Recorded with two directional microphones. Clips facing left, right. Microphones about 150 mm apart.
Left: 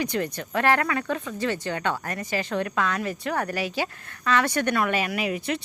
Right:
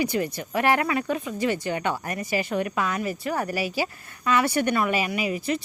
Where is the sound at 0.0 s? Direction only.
10° right (ahead or behind).